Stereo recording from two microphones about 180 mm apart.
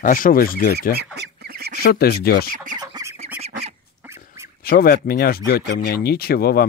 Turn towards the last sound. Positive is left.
turn(degrees=55)  # may be behind; listen again after turning